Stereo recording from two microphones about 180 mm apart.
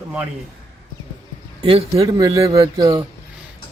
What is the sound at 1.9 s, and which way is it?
Speech, 20° right (ahead or behind).